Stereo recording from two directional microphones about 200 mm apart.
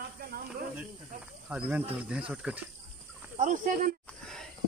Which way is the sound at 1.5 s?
5° right (ahead or behind).